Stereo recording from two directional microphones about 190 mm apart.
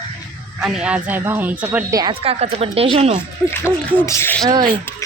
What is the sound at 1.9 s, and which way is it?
Speech, 25° right (ahead or behind).